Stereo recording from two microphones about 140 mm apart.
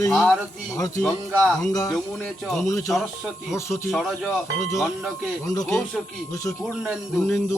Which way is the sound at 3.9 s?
Centre (ahead or behind).